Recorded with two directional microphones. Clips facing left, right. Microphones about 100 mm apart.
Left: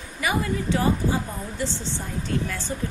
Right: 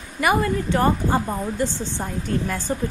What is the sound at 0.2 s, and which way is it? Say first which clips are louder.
A woman's voice: right 5 dB; 55° right (ahead or behind).